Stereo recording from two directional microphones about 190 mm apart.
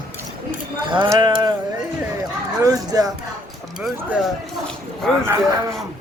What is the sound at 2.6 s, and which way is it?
Speech, 20° right (ahead or behind).